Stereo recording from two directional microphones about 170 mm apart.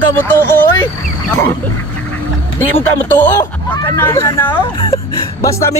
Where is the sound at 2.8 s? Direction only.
10° left (ahead or behind).